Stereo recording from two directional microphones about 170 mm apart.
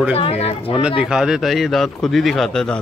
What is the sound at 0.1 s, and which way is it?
Speech, 35° left (ahead or behind).